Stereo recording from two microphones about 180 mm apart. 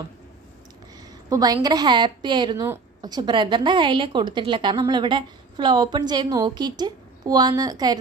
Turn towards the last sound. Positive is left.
turn(degrees=-20)  # may be behind; listen again after turning